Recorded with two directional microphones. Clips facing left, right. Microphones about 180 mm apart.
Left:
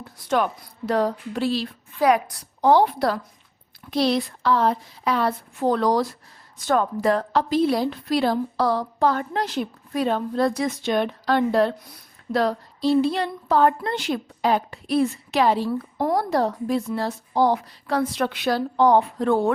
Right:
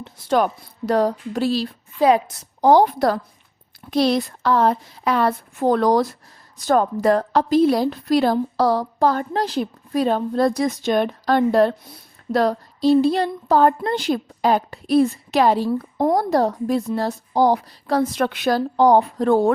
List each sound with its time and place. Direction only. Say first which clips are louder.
0.0 s a woman's voice: right 4 dB; 35° right (ahead or behind)
2.0 s a woman's voice: right 3 dB; 25° right (ahead or behind)
2.6 s a woman's voice: right 3 dB; 40° right (ahead or behind)
16.0 s a woman's voice: right 4 dB; 20° right (ahead or behind)
16.3 s a woman's voice: right 3 dB; 40° right (ahead or behind)